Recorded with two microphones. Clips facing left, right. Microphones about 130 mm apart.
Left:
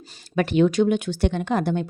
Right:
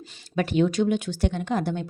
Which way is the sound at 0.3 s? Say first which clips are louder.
Left 4 dB; 70° left (ahead or behind).